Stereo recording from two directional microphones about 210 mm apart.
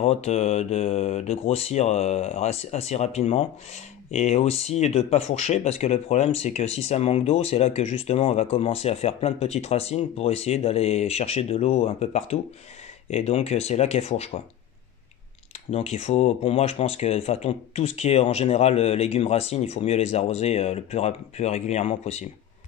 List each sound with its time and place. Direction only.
0.0 s speech: 30° left (ahead or behind)
15.7 s speech: 30° left (ahead or behind)